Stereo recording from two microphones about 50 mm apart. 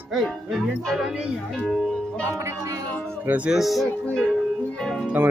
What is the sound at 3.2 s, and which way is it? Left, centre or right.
Speech, right.